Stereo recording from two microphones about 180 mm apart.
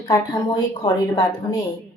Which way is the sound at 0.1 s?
20° left (ahead or behind).